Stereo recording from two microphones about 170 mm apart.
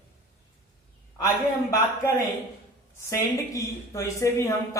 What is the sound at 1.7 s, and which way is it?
A woman's voice, 15° left (ahead or behind).